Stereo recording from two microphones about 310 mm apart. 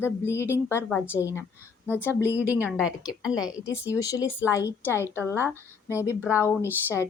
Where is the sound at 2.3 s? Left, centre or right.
Centre.